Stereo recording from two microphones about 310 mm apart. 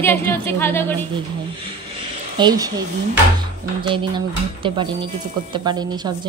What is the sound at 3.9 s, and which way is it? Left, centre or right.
A woman's voice, centre.